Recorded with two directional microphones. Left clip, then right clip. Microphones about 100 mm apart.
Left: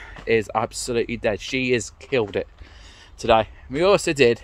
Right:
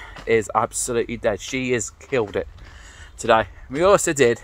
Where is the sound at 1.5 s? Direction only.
80° left.